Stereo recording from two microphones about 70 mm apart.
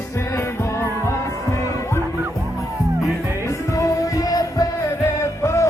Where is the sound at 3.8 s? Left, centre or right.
Left.